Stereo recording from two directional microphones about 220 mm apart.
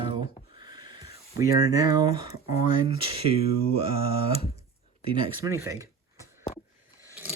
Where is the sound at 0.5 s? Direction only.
20° right (ahead or behind).